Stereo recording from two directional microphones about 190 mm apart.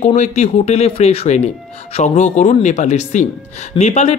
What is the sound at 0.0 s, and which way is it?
Speech, 35° left (ahead or behind).